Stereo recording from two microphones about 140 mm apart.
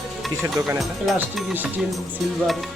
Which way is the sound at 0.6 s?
25° right (ahead or behind).